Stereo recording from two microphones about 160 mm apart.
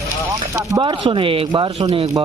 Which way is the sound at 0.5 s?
20° right (ahead or behind).